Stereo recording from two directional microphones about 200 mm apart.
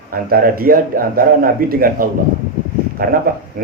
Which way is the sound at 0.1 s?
45° right (ahead or behind).